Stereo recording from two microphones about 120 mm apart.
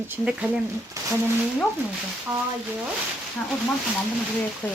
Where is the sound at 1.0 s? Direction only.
25° right (ahead or behind).